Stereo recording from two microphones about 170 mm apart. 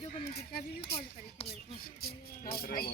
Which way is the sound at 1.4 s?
35° left (ahead or behind).